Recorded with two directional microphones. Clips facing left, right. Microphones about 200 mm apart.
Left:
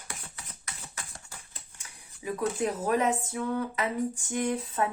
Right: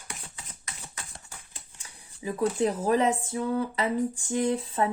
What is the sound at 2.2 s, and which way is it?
Speech, 30° right (ahead or behind).